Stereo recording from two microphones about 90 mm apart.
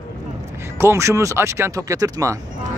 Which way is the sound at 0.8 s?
30° right (ahead or behind).